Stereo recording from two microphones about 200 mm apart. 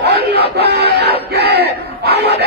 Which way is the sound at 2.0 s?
50° right (ahead or behind).